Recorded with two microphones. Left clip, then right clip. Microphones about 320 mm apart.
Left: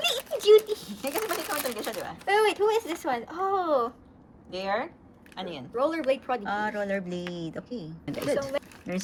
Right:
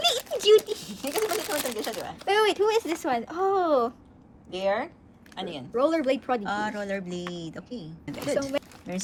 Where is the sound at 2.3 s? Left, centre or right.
Right.